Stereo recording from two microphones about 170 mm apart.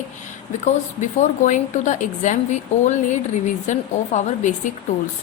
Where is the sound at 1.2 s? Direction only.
45° left (ahead or behind).